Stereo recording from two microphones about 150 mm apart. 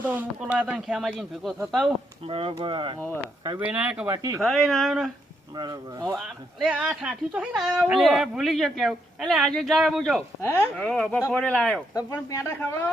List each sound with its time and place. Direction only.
0.0 s speech: 10° right (ahead or behind)
2.2 s speech: 40° right (ahead or behind)
3.6 s speech: 10° right (ahead or behind)
4.1 s speech: 25° right (ahead or behind)
4.4 s speech: centre (ahead or behind)
5.5 s speech: 30° right (ahead or behind)
6.1 s speech: centre (ahead or behind)
10.4 s speech: 15° left (ahead or behind)
11.9 s speech: 20° left (ahead or behind)